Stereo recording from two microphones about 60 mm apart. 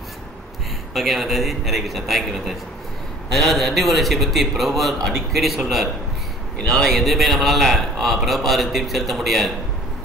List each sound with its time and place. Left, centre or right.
0.9 s a man's voice: centre